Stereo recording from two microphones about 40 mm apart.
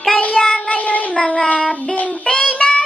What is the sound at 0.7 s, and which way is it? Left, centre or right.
Child singing, left.